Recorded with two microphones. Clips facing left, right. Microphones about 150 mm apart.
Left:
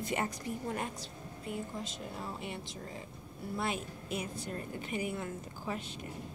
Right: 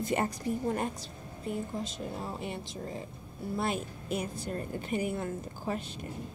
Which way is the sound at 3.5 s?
40° right (ahead or behind).